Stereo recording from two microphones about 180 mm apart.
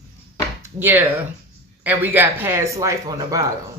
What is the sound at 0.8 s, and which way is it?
Speech, 10° right (ahead or behind).